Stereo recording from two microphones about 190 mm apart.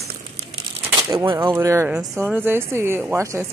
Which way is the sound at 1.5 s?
15° right (ahead or behind).